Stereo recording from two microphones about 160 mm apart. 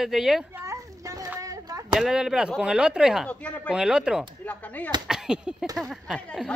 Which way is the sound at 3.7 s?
5° right (ahead or behind).